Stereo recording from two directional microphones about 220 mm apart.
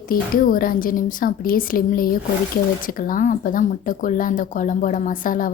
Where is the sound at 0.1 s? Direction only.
40° left (ahead or behind).